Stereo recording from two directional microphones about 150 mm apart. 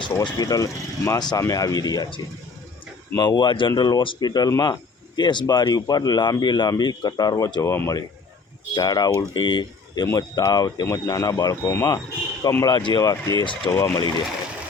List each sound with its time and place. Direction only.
0.0 s speech: 25° left (ahead or behind)
13.7 s speech: 20° left (ahead or behind)
13.9 s speech: 30° left (ahead or behind)